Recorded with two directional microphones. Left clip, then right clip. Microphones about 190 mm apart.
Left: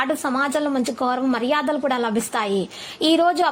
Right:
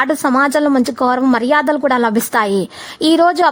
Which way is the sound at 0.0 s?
40° right (ahead or behind).